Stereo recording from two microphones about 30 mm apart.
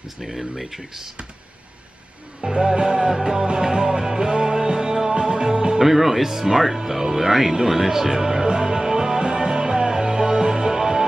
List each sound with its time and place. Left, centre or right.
0.2 s speech: centre
2.5 s music: right
5.8 s speech: centre
8.5 s music: right